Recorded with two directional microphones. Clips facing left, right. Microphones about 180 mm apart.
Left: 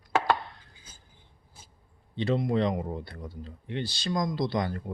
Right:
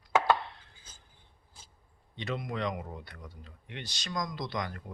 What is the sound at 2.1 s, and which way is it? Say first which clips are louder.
Speech: left 9 dB; 30° left (ahead or behind).